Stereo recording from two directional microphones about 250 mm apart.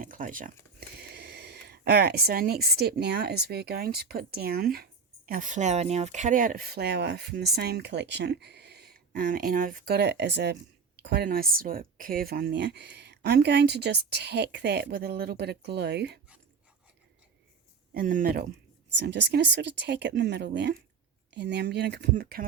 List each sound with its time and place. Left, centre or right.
0.0 s speech: right
17.9 s speech: right